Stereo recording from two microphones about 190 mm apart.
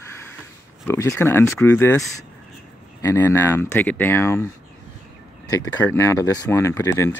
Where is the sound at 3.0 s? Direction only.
15° left (ahead or behind).